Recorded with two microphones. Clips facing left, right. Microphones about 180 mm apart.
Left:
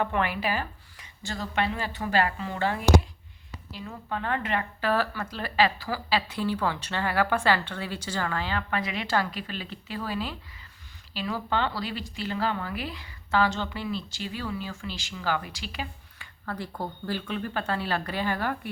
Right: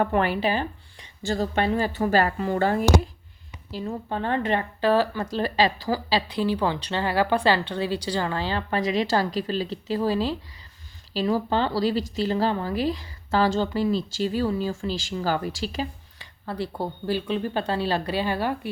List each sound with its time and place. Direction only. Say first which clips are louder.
0.0 s speech: right 5 dB; 40° right (ahead or behind)
3.7 s speech: right 6 dB; 35° right (ahead or behind)
5.2 s speech: right 3 dB; 35° right (ahead or behind)
6.3 s speech: right 4 dB; 15° right (ahead or behind)
8.0 s speech: right 5 dB; 15° right (ahead or behind)
8.3 s speech: right 3 dB; 30° right (ahead or behind)
17.1 s speech: right 6 dB; 20° right (ahead or behind)
18.0 s speech: right 4 dB; 15° right (ahead or behind)